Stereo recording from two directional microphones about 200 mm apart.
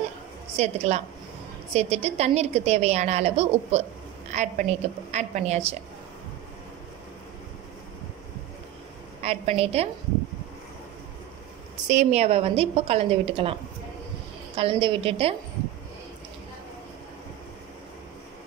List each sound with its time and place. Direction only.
0.6 s a woman's voice: 35° right (ahead or behind)
9.2 s a woman's voice: 30° right (ahead or behind)
11.7 s a woman's voice: 35° right (ahead or behind)
14.6 s a woman's voice: 25° right (ahead or behind)